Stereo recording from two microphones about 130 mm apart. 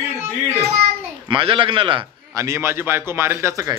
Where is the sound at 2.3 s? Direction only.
20° right (ahead or behind).